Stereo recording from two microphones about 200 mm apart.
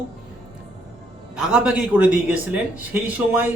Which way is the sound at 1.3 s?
5° right (ahead or behind).